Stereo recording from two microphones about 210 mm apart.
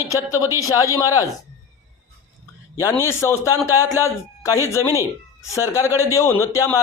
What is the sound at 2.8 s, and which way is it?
A man's voice, 15° left (ahead or behind).